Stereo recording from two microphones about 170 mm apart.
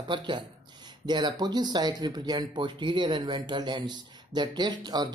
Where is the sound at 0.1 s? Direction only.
25° right (ahead or behind).